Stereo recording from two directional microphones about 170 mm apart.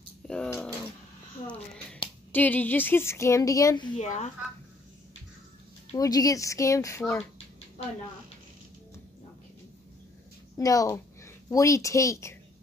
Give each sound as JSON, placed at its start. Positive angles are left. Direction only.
{"t": 0.3, "sound": "a sound", "side_deg": 5}
{"t": 2.3, "sound": "speech", "side_deg": 10}
{"t": 3.9, "sound": "speech", "side_deg": 40}
{"t": 5.9, "sound": "speech", "side_deg": 20}
{"t": 7.0, "sound": "speech", "side_deg": 5}
{"t": 10.6, "sound": "speech", "side_deg": 20}